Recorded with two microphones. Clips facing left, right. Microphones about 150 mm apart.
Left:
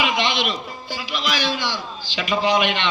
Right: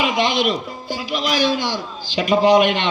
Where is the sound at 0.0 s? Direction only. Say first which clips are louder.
Right 4 dB; 45° right (ahead or behind).